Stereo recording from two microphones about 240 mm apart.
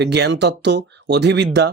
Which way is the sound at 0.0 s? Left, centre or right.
Right.